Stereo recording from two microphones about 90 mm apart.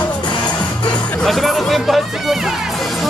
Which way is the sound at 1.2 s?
Centre (ahead or behind).